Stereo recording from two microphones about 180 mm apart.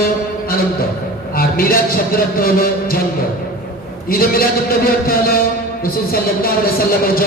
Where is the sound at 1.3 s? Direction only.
55° left (ahead or behind).